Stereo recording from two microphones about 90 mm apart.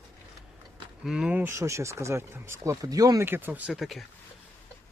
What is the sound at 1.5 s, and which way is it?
Speech, 30° right (ahead or behind).